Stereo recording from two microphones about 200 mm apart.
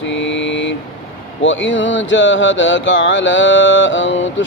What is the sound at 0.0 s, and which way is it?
Vehicle, 65° left (ahead or behind).